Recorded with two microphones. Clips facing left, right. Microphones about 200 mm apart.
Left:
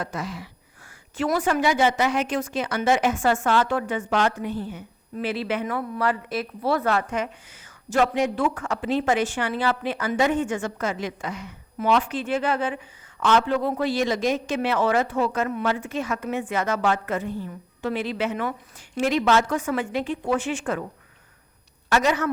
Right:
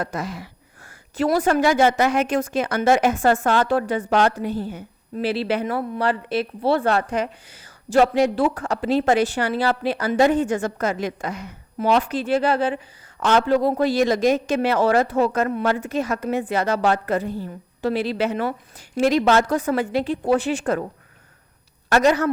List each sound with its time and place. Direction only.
0.0 s a sound: 40° right (ahead or behind)
1.1 s speech: 40° right (ahead or behind)
21.8 s a woman's voice: 40° right (ahead or behind)